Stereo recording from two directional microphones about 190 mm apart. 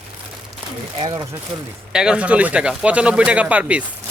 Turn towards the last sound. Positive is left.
turn(degrees=-5)  # may be behind; listen again after turning